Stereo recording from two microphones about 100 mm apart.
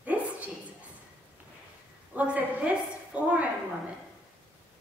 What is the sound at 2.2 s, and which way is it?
A woman's voice, 15° right (ahead or behind).